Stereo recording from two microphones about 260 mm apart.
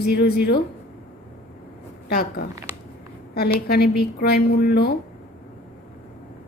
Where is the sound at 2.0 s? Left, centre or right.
Left.